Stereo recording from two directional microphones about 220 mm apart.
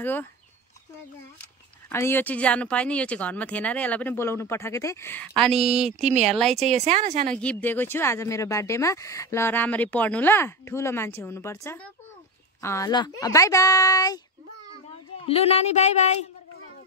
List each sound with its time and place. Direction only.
0.0 s speech: 10° left (ahead or behind)
1.9 s speech: 10° left (ahead or behind)
5.5 s speech: 30° right (ahead or behind)
7.2 s speech: 5° left (ahead or behind)
15.2 s speech: 30° left (ahead or behind)